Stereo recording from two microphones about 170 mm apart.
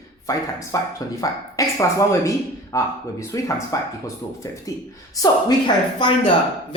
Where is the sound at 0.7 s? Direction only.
20° left (ahead or behind).